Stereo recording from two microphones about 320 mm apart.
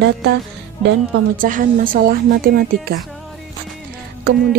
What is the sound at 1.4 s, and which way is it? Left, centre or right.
A woman's voice, right.